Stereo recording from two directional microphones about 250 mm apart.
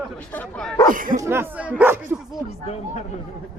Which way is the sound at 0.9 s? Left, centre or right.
Right.